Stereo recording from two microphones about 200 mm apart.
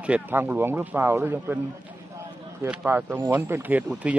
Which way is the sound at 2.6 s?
10° right (ahead or behind).